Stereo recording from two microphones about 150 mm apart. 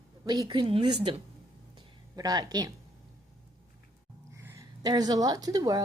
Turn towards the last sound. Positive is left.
turn(degrees=-25)  # may be behind; listen again after turning